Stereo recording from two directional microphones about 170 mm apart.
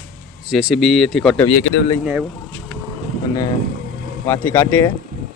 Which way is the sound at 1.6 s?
90° left.